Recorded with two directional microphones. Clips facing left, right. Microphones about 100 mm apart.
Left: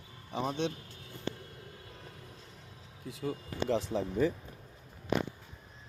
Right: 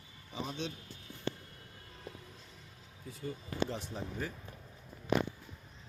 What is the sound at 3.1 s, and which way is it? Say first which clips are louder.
Speech: left 4 dB; 90° left.